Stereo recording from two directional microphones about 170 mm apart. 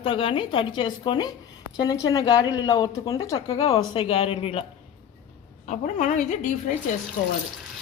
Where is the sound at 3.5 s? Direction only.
35° left (ahead or behind).